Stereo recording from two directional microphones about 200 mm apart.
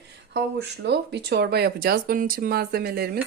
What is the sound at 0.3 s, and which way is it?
Speech, 55° right (ahead or behind).